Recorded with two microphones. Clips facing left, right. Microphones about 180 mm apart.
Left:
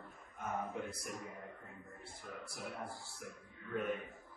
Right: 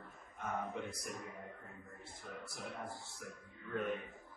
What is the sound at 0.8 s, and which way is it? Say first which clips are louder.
Speech: left 1 dB; 5° left (ahead or behind).